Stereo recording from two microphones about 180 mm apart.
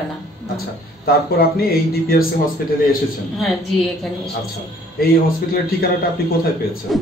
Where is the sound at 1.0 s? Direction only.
55° left (ahead or behind).